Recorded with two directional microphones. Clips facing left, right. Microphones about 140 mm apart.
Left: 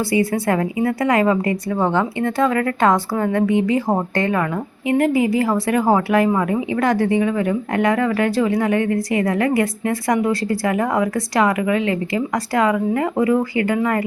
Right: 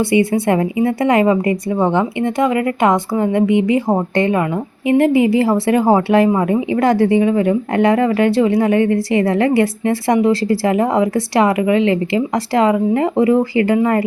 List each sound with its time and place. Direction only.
0.0 s speech: 25° right (ahead or behind)